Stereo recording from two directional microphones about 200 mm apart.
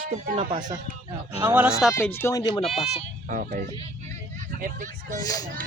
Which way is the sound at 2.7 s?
30° left (ahead or behind).